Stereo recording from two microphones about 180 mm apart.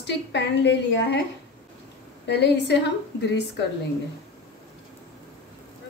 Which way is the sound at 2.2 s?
70° left (ahead or behind).